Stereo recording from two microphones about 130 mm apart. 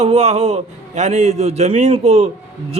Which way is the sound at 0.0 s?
55° right (ahead or behind).